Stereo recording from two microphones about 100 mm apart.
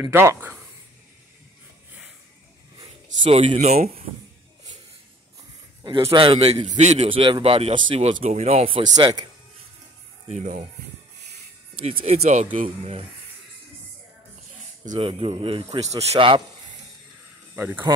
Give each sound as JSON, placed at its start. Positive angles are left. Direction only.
{"t": 0.1, "sound": "speech", "side_deg": -25}
{"t": 3.3, "sound": "speech", "side_deg": -75}
{"t": 6.0, "sound": "a man's voice", "side_deg": -60}
{"t": 8.9, "sound": "speech", "side_deg": -40}
{"t": 11.8, "sound": "speech", "side_deg": -80}
{"t": 15.0, "sound": "a man's voice", "side_deg": -65}
{"t": 17.6, "sound": "speech", "side_deg": -20}